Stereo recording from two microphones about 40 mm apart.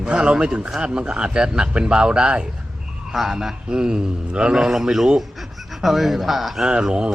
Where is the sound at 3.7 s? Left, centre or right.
Right.